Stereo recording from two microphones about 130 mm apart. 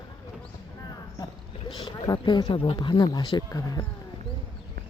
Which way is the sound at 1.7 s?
35° left (ahead or behind).